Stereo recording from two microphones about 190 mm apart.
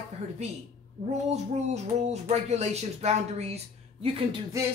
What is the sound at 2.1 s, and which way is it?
Speech, 35° right (ahead or behind).